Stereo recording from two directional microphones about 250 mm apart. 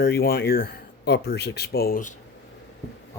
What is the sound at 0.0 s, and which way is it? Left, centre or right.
Speech, left.